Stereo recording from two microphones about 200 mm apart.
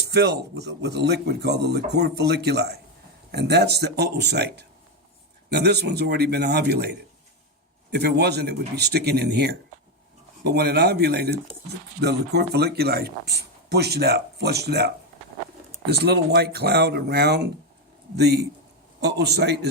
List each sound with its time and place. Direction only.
0.1 s speech: 55° right (ahead or behind)
15.9 s speech: 55° right (ahead or behind)